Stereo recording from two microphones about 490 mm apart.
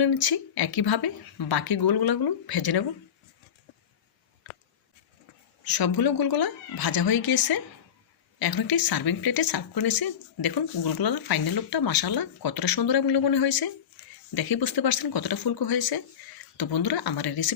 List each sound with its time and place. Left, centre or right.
0.0 s a woman's voice: left
5.6 s a woman's voice: left